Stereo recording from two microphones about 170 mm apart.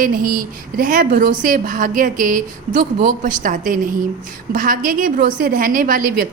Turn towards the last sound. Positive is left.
turn(degrees=-55)  # may be behind; listen again after turning